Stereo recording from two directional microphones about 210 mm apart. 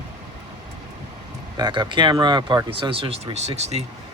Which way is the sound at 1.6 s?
20° right (ahead or behind).